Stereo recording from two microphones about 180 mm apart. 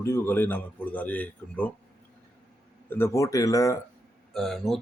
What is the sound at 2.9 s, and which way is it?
Speech, 15° left (ahead or behind).